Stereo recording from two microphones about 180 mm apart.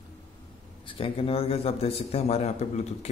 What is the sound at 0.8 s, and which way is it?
A man's voice, 30° left (ahead or behind).